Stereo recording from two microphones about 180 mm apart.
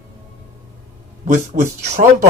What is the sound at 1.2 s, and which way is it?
Speech, 45° right (ahead or behind).